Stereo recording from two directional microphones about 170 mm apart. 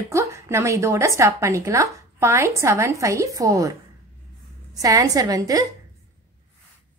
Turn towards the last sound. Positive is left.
turn(degrees=-20)  # may be behind; listen again after turning